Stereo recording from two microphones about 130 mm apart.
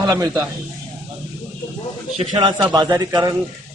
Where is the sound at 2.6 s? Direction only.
30° right (ahead or behind).